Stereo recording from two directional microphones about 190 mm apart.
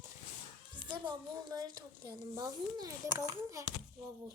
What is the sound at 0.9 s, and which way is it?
A woman's voice, 20° right (ahead or behind).